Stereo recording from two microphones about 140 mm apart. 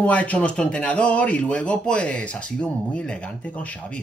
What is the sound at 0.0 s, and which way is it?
Speech, 10° left (ahead or behind).